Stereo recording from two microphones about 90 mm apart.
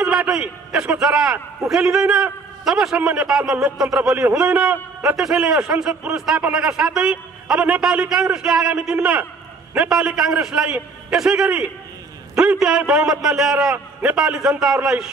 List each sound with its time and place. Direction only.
0.0 s a man's voice: 15° right (ahead or behind)
5.1 s a man's voice: 5° right (ahead or behind)